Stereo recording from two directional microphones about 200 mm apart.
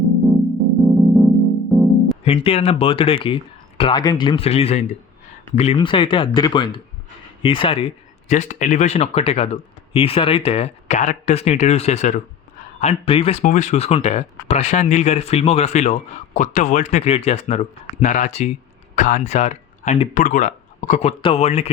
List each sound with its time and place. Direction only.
0.9 s music: centre (ahead or behind)
2.2 s speech: 30° left (ahead or behind)